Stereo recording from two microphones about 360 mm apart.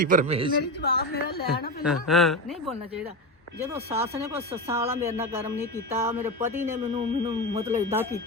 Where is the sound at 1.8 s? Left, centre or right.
Centre.